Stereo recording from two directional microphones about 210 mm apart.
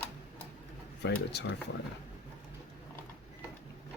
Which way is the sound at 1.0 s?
55° left (ahead or behind).